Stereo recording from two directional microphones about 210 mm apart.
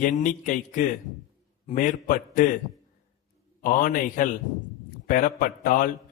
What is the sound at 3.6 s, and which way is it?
A man's voice, 40° left (ahead or behind).